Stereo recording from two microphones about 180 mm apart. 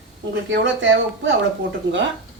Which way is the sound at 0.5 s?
90° right.